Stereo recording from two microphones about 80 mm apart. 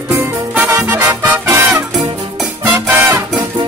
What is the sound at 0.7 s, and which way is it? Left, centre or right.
Music, right.